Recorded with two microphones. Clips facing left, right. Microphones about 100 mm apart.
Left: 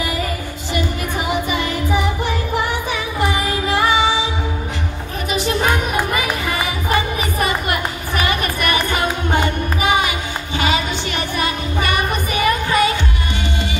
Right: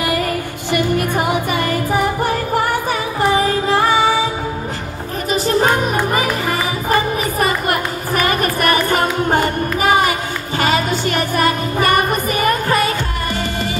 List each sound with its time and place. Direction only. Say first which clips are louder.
0.7 s music: right 5 dB; 55° right (ahead or behind)
5.3 s music: right 3 dB; 35° right (ahead or behind)